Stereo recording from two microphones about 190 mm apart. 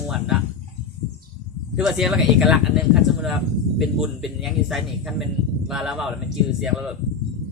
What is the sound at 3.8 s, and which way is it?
Speech, centre (ahead or behind).